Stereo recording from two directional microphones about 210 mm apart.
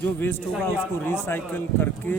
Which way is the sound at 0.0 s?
10° left (ahead or behind).